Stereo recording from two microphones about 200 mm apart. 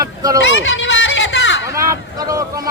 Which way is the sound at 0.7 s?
65° left (ahead or behind).